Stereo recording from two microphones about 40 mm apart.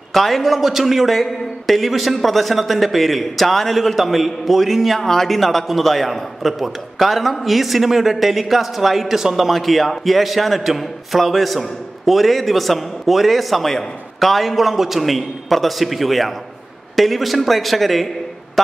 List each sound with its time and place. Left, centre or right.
0.1 s a man's voice: centre